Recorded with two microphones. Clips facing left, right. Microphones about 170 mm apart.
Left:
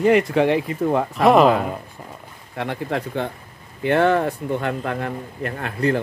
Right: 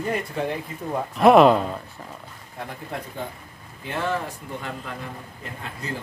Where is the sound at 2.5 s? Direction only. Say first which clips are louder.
Left 9 dB; 85° left.